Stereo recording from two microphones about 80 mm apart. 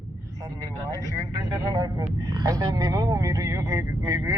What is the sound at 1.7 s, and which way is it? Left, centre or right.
Speech, right.